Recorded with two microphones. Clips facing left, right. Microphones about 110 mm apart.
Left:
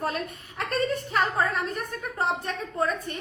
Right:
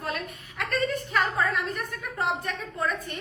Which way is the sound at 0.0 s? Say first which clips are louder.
Left 3 dB; 30° left (ahead or behind).